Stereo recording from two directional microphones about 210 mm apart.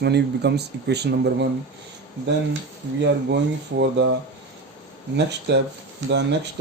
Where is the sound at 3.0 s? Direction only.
55° right (ahead or behind).